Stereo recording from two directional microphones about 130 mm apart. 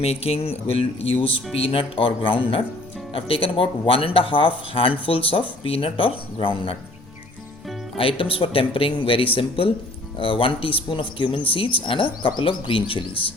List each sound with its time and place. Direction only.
0.0 s speech: 50° left (ahead or behind)
7.9 s speech: 45° left (ahead or behind)